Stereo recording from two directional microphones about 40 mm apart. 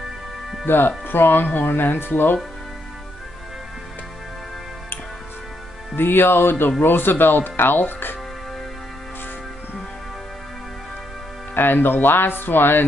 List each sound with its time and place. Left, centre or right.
0.7 s speech: left
5.9 s speech: left
11.5 s speech: left